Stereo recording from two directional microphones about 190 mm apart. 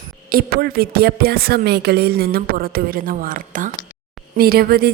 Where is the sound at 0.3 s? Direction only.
50° right (ahead or behind).